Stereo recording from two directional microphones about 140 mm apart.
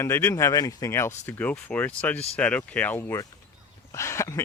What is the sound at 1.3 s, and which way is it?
Speech, 10° left (ahead or behind).